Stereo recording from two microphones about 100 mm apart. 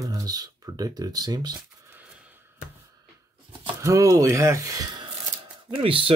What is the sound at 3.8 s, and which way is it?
Speech, 35° right (ahead or behind).